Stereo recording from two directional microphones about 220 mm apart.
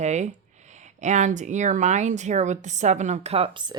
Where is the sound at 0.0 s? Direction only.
30° right (ahead or behind).